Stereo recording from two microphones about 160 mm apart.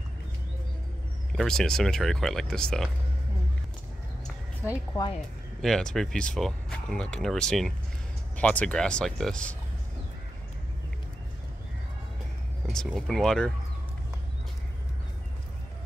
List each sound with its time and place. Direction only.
1.3 s speech: 5° left (ahead or behind)
5.6 s speech: 5° left (ahead or behind)
12.6 s speech: centre (ahead or behind)